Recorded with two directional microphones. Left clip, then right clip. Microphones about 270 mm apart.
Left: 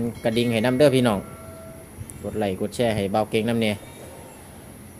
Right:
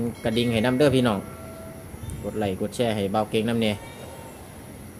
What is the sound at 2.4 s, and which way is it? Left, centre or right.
Speech, centre.